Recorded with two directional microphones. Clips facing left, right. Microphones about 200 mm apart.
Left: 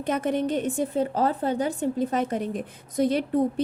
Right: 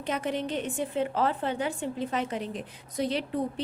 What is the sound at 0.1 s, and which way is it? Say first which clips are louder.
A woman's voice: left 5 dB; 50° left (ahead or behind).